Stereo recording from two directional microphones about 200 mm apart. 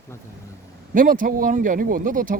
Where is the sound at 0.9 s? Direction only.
40° right (ahead or behind).